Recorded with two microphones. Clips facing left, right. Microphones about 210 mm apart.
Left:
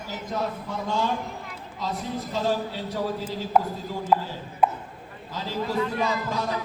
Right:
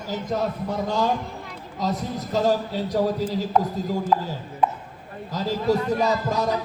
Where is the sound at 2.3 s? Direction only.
40° right (ahead or behind).